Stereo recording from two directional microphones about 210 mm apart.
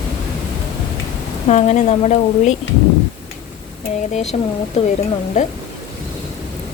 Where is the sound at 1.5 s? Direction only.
35° left (ahead or behind).